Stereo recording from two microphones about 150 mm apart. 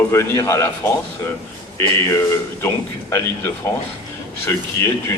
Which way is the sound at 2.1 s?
15° left (ahead or behind).